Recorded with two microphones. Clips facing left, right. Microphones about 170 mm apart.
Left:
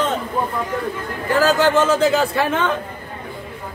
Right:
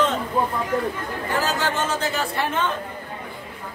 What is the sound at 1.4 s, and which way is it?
Speech, 90° left.